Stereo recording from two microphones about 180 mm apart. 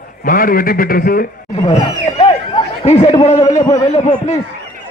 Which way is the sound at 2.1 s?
35° left (ahead or behind).